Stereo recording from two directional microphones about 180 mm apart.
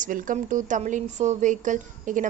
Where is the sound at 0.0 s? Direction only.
45° right (ahead or behind).